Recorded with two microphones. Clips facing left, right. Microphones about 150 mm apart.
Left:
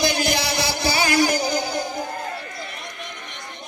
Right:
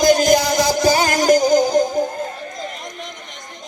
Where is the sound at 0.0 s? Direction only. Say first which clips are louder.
Right 9 dB; 45° right (ahead or behind).